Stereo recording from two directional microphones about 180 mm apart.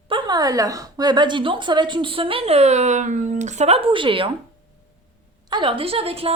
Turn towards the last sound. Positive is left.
turn(degrees=-30)  # may be behind; listen again after turning